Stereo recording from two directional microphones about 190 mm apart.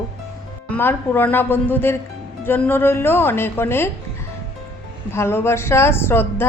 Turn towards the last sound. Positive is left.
turn(degrees=10)  # may be behind; listen again after turning